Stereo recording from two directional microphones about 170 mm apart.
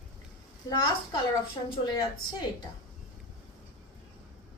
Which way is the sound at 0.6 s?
25° left (ahead or behind).